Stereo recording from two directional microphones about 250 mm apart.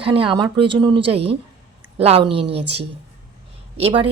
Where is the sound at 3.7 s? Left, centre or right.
Right.